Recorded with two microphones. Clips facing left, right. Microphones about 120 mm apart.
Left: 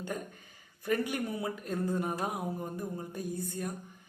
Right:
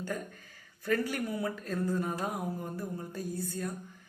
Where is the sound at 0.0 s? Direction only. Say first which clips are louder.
Right 1 dB; 20° left (ahead or behind).